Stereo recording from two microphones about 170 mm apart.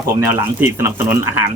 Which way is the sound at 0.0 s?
15° right (ahead or behind).